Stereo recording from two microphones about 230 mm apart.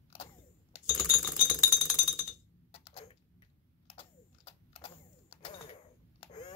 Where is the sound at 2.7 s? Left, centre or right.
Left.